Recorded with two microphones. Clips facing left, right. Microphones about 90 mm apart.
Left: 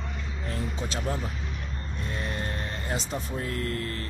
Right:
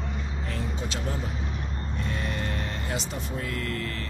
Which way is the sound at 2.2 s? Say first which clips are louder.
Right 1 dB; 30° left (ahead or behind).